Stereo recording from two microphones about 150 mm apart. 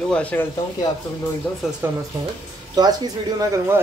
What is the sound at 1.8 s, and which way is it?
Speech, 15° right (ahead or behind).